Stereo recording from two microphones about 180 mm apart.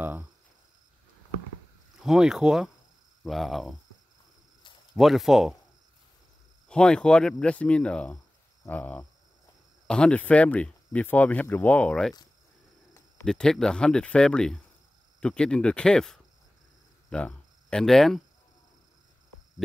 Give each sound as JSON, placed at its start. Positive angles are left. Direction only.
{"t": 0.0, "sound": "a sound", "side_deg": -10}
{"t": 2.0, "sound": "speech", "side_deg": -5}
{"t": 4.9, "sound": "speech", "side_deg": 0}
{"t": 6.7, "sound": "speech", "side_deg": 5}
{"t": 13.2, "sound": "speech", "side_deg": 5}